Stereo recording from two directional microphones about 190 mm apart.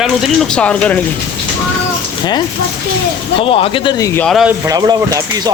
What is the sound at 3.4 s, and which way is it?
Speech, 30° left (ahead or behind).